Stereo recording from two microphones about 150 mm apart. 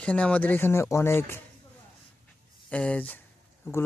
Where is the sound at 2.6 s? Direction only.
10° left (ahead or behind).